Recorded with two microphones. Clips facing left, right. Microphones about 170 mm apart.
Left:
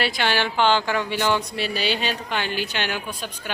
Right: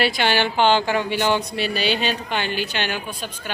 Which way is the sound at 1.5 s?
60° right (ahead or behind).